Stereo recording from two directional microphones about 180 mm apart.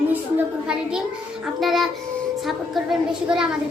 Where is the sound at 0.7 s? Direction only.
5° right (ahead or behind).